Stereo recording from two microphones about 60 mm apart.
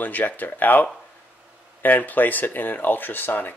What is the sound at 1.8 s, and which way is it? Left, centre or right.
Speech, left.